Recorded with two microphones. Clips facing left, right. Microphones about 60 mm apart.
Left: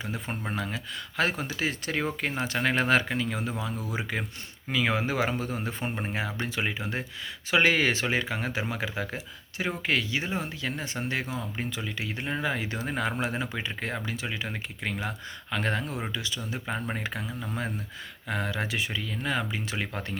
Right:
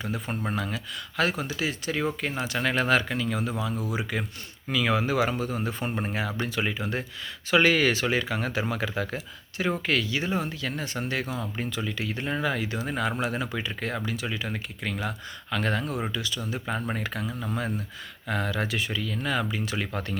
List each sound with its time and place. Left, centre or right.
0.0 s speech: centre
12.5 s speech: left
18.3 s speech: centre